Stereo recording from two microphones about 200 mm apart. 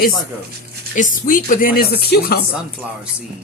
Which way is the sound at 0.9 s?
40° left (ahead or behind).